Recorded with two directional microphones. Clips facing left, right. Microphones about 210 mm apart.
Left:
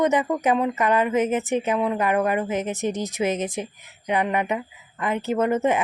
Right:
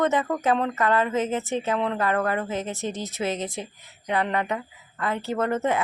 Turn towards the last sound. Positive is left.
turn(degrees=20)  # may be behind; listen again after turning